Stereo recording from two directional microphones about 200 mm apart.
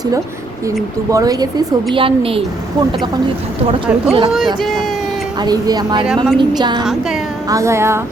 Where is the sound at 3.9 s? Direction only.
5° right (ahead or behind).